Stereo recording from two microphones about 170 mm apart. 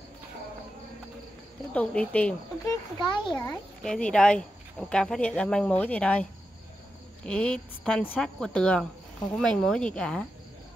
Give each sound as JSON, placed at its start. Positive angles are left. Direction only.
{"t": 1.7, "sound": "speech", "side_deg": 10}
{"t": 3.0, "sound": "a child's voice", "side_deg": 25}
{"t": 3.3, "sound": "speech", "side_deg": 5}
{"t": 7.2, "sound": "speech", "side_deg": 5}